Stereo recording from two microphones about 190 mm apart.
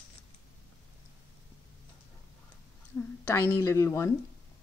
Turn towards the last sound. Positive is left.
turn(degrees=15)  # may be behind; listen again after turning